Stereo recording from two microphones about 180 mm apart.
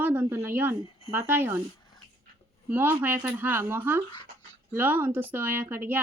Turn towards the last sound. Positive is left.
turn(degrees=-10)  # may be behind; listen again after turning